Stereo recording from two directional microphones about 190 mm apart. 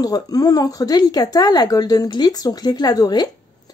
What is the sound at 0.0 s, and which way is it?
Speech, 20° left (ahead or behind).